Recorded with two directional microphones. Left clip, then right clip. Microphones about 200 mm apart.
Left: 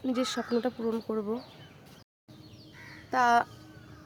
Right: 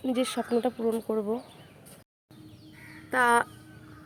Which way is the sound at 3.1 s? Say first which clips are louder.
Right 1 dB; 5° right (ahead or behind).